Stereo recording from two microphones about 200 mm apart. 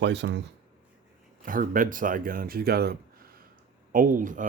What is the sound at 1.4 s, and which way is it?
Speech, 45° right (ahead or behind).